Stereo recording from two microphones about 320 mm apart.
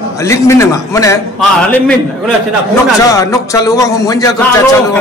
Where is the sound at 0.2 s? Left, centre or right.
Centre.